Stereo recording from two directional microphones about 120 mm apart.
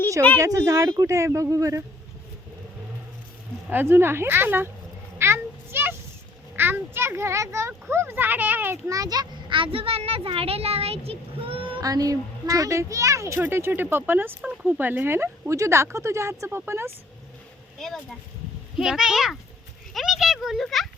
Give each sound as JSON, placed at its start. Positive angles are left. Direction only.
{"t": 0.4, "sound": "a woman's voice", "side_deg": -30}
{"t": 3.7, "sound": "speech", "side_deg": -15}
{"t": 5.1, "sound": "a sound", "side_deg": -20}
{"t": 6.6, "sound": "a child's voice", "side_deg": -20}
{"t": 11.8, "sound": "a woman's voice", "side_deg": -30}
{"t": 18.8, "sound": "a child's voice", "side_deg": -5}